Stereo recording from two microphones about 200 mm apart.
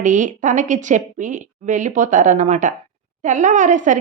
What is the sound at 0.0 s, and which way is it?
A woman's voice, 40° right (ahead or behind).